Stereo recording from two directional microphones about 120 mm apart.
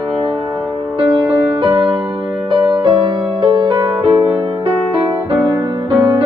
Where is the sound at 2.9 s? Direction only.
45° right (ahead or behind).